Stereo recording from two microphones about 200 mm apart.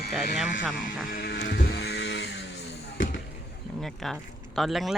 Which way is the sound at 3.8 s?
Centre (ahead or behind).